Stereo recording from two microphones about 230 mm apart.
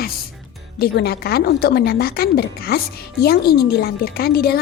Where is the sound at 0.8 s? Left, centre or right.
Left.